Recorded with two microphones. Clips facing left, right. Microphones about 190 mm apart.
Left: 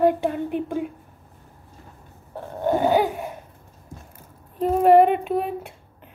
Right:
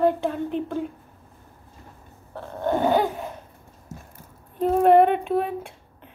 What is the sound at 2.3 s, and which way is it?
Burping, 15° left (ahead or behind).